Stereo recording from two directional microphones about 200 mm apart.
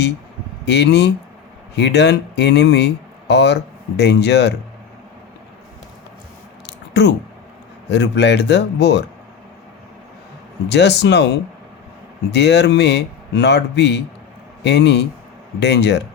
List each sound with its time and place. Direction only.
0.6 s speech: 60° left (ahead or behind)
6.7 s a sound: 60° left (ahead or behind)
7.9 s speech: 60° left (ahead or behind)
10.7 s a man's voice: 60° left (ahead or behind)